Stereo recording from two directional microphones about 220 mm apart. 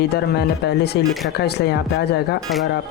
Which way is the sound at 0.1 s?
50° left (ahead or behind).